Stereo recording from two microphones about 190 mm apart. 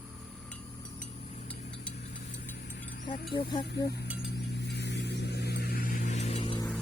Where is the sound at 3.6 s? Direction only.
60° left (ahead or behind).